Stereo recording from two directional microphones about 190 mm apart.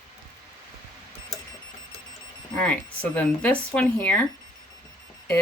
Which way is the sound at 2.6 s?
5° left (ahead or behind).